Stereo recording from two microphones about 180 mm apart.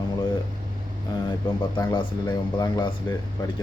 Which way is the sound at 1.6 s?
25° left (ahead or behind).